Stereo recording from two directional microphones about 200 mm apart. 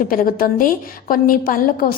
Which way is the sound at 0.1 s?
45° left (ahead or behind).